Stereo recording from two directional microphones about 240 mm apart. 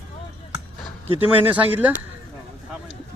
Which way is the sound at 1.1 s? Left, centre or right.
Centre.